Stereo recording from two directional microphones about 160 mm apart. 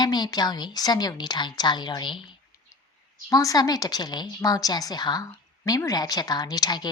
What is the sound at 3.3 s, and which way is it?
A woman's voice, 20° left (ahead or behind).